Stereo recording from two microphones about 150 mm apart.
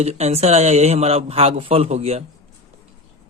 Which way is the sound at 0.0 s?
45° right (ahead or behind).